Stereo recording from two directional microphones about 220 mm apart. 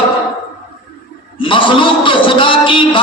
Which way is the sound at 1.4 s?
25° left (ahead or behind).